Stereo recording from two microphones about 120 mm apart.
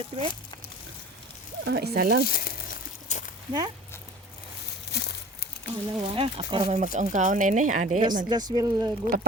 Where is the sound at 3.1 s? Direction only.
90° left.